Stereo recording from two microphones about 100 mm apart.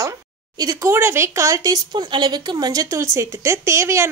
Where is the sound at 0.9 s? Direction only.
25° right (ahead or behind).